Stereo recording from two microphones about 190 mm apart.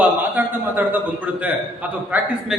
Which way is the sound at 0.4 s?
10° right (ahead or behind).